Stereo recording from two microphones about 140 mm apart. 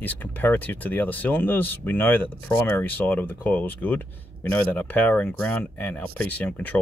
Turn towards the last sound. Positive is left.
turn(degrees=10)  # may be behind; listen again after turning